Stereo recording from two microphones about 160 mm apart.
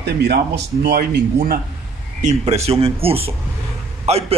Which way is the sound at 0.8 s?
80° right.